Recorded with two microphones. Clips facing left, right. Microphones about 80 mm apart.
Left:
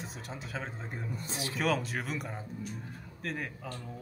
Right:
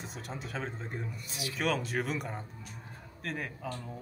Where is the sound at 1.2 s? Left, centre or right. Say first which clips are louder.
Left 2 dB; left.